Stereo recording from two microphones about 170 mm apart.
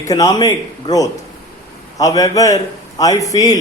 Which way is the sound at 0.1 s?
20° left (ahead or behind).